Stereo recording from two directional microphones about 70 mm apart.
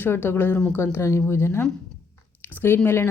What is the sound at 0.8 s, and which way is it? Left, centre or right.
A woman's voice, left.